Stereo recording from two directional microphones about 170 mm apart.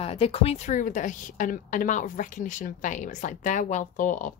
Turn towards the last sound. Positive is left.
turn(degrees=50)  # may be behind; listen again after turning